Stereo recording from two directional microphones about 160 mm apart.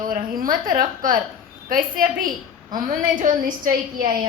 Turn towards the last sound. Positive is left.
turn(degrees=-60)  # may be behind; listen again after turning